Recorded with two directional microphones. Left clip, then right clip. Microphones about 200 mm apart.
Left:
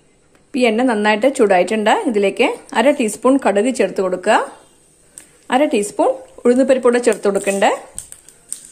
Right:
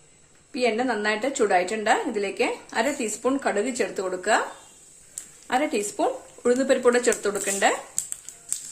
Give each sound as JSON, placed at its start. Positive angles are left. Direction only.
{"t": 0.5, "sound": "a woman's voice", "side_deg": 40}
{"t": 5.5, "sound": "a woman's voice", "side_deg": 40}